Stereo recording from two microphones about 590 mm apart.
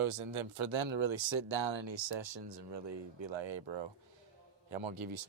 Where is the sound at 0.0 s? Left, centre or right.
Right.